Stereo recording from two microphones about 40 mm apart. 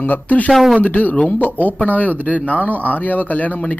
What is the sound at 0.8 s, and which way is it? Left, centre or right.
Speech, left.